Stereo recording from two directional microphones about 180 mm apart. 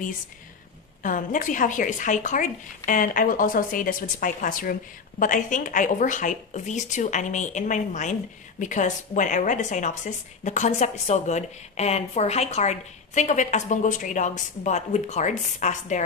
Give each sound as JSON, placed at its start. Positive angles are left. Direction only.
{"t": 1.0, "sound": "speech", "side_deg": 45}